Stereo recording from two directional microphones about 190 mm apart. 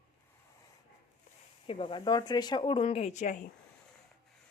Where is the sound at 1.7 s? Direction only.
25° left (ahead or behind).